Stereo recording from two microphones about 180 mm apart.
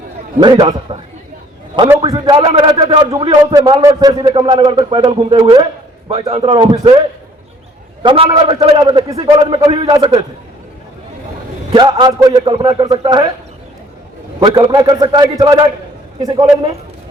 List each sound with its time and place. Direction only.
0.3 s a man's voice: 20° right (ahead or behind)
8.0 s a man's voice: 30° right (ahead or behind)
11.7 s a man's voice: 25° right (ahead or behind)
14.3 s a man's voice: 30° right (ahead or behind)